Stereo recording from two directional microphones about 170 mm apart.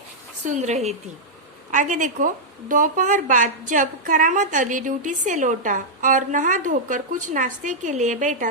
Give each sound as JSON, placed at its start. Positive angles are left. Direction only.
{"t": 0.4, "sound": "a woman's voice", "side_deg": -45}